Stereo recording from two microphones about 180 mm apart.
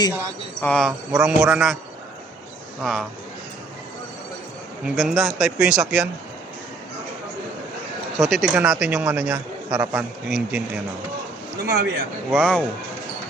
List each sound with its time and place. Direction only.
0.6 s a man's voice: 5° left (ahead or behind)
2.8 s a man's voice: centre (ahead or behind)
4.9 s a man's voice: centre (ahead or behind)
8.2 s a man's voice: centre (ahead or behind)
11.6 s speech: 60° right (ahead or behind)
12.3 s a man's voice: 5° left (ahead or behind)